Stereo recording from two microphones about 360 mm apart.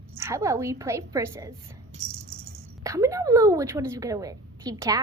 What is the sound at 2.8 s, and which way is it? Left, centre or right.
A woman's voice, centre.